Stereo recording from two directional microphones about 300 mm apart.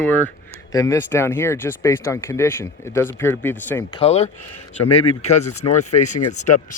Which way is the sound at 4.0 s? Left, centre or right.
Left.